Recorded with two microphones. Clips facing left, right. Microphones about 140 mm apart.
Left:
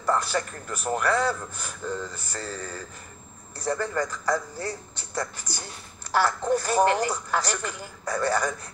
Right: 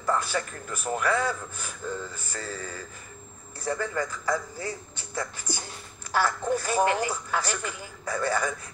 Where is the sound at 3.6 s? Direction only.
40° left (ahead or behind).